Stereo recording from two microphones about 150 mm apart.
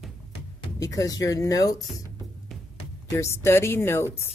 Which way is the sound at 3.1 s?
15° left (ahead or behind).